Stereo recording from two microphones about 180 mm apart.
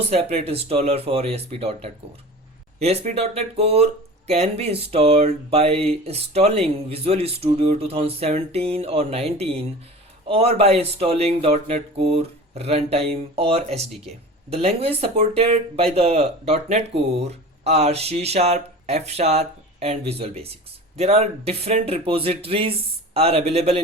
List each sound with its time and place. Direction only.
0.1 s speech: 35° right (ahead or behind)